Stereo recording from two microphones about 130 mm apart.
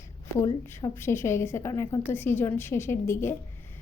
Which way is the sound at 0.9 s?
20° left (ahead or behind).